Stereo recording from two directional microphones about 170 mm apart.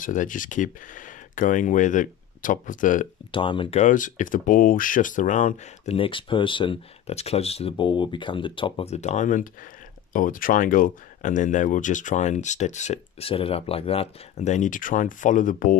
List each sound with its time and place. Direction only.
0.0 s speech: 50° left (ahead or behind)
3.3 s speech: 30° left (ahead or behind)
3.8 s speech: 50° left (ahead or behind)
5.9 s speech: 30° left (ahead or behind); by 15.8 s 50° left (ahead or behind)